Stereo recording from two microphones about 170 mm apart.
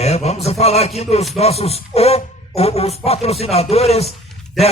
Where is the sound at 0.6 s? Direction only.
40° left (ahead or behind).